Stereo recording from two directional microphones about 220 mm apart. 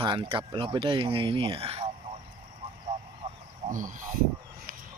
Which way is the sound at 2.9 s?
30° right (ahead or behind).